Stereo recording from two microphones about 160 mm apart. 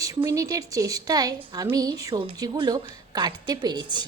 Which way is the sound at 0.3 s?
20° right (ahead or behind).